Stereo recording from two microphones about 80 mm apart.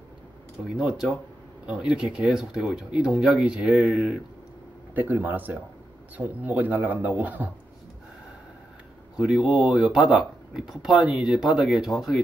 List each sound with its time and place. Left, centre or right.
0.7 s speech: centre
4.9 s a man's voice: right
9.1 s speech: centre